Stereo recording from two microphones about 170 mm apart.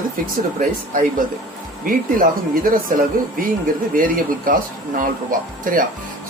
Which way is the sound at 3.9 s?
55° right (ahead or behind).